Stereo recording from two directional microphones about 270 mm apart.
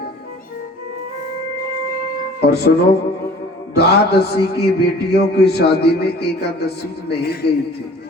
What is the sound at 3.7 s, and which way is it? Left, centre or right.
A man's voice, left.